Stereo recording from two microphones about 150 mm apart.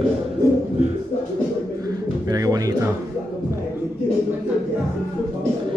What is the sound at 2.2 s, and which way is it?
Music, 25° right (ahead or behind).